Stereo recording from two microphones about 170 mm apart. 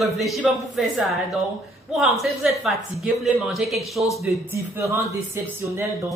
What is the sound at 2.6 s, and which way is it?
Speech, centre (ahead or behind).